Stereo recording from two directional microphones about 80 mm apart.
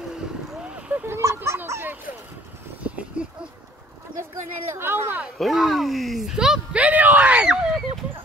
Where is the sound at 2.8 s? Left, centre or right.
Centre.